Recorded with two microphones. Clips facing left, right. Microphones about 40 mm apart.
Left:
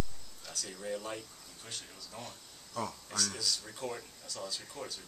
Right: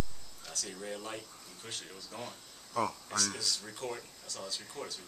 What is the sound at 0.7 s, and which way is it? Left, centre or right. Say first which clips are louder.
Speech: left 3 dB; centre.